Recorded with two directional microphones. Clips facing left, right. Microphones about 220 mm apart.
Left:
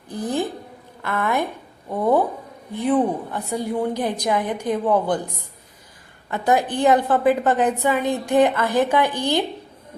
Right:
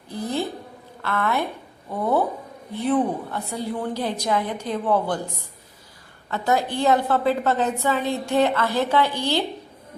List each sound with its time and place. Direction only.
0.1 s a sound: 15° left (ahead or behind)
1.0 s a woman's voice: 15° left (ahead or behind)
2.7 s a woman's voice: 15° left (ahead or behind)
6.3 s a woman's voice: 15° left (ahead or behind)